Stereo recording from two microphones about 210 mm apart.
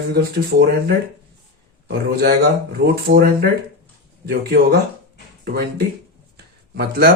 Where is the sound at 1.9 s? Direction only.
55° right (ahead or behind).